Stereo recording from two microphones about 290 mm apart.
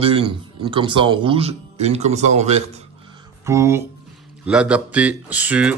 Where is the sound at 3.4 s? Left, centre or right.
Centre.